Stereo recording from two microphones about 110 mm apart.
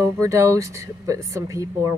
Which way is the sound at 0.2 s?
30° right (ahead or behind).